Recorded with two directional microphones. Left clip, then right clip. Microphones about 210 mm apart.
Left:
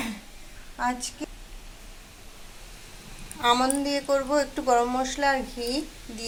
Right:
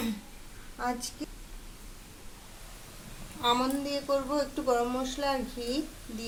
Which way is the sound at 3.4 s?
15° left (ahead or behind).